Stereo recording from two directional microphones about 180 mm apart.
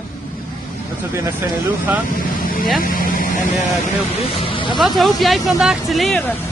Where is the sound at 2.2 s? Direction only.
50° left (ahead or behind).